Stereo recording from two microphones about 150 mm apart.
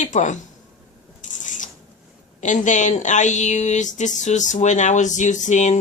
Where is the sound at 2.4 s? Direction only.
55° left (ahead or behind).